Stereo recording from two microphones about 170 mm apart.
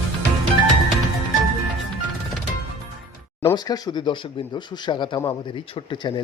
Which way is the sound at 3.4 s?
20° left (ahead or behind).